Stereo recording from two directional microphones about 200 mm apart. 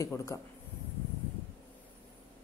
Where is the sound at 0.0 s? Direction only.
15° left (ahead or behind).